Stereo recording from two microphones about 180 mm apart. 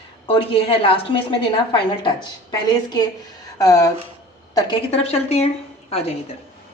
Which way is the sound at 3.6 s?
20° left (ahead or behind).